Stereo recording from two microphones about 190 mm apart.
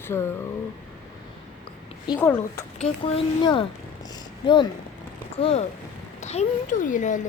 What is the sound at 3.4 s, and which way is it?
A woman's voice, 25° left (ahead or behind).